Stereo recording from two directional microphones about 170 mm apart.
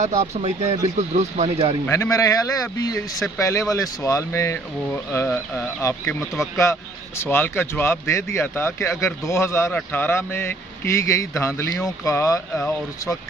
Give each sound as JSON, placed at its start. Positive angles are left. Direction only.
{"t": 0.0, "sound": "speech", "side_deg": -40}
{"t": 1.9, "sound": "speech", "side_deg": 20}